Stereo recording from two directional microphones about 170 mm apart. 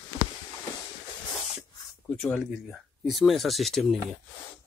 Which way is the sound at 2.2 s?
Centre (ahead or behind).